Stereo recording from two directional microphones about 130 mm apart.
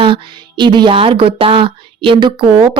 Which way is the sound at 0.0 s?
40° right (ahead or behind).